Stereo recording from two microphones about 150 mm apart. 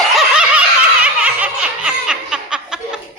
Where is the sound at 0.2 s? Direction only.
5° right (ahead or behind).